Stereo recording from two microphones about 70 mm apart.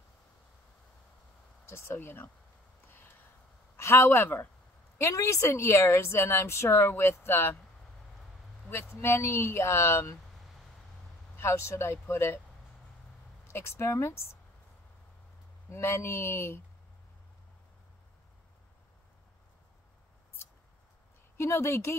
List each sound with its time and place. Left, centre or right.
1.7 s a woman's voice: left
3.7 s a man's voice: left
4.9 s a woman's voice: left
8.6 s a woman's voice: left
10.3 s vehicle: centre
11.3 s a woman's voice: left
13.5 s a woman's voice: left
15.7 s a woman's voice: left
21.4 s a woman's voice: left